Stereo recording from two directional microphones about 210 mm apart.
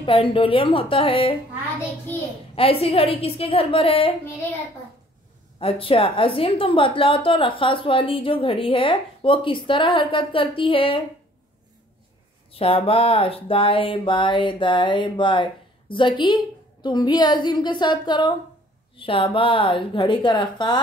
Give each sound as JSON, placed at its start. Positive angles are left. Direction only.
{"t": 0.0, "sound": "a woman's voice", "side_deg": 25}
{"t": 2.5, "sound": "a woman's voice", "side_deg": 25}
{"t": 5.6, "sound": "a woman's voice", "side_deg": 25}
{"t": 12.5, "sound": "a woman's voice", "side_deg": 25}